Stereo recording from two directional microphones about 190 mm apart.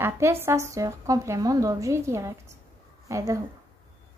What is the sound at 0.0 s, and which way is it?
A woman's voice, 15° right (ahead or behind).